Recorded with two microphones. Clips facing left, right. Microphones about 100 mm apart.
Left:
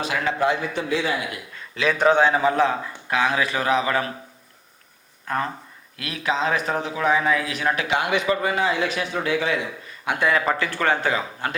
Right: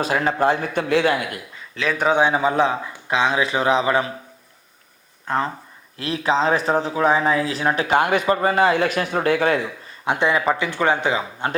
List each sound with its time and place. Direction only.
0.0 s speech: 40° right (ahead or behind); by 1.1 s 60° right (ahead or behind)
1.7 s a man's voice: centre (ahead or behind); by 4.1 s 25° right (ahead or behind)
5.3 s a man's voice: 25° right (ahead or behind)
7.9 s speech: 45° right (ahead or behind)
8.6 s speech: 50° right (ahead or behind)
10.1 s a man's voice: 20° right (ahead or behind)